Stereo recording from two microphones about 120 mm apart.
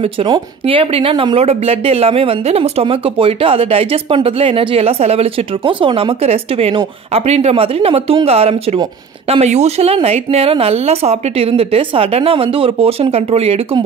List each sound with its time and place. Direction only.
0.0 s speech: 50° right (ahead or behind)